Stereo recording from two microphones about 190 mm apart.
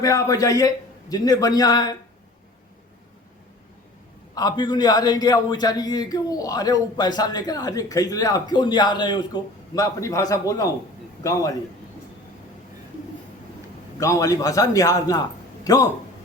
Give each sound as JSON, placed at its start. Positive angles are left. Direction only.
{"t": 0.0, "sound": "a man's voice", "side_deg": 20}
{"t": 4.4, "sound": "a man's voice", "side_deg": 20}
{"t": 14.0, "sound": "a man's voice", "side_deg": 15}